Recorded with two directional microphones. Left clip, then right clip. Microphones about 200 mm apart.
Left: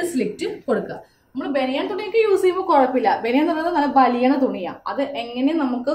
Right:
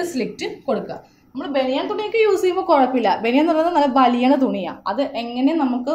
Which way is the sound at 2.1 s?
40° right (ahead or behind).